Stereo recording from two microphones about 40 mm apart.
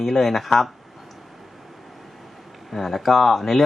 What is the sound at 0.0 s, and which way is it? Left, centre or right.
Speech, centre.